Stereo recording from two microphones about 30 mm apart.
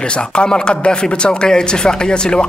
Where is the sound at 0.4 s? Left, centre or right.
Left.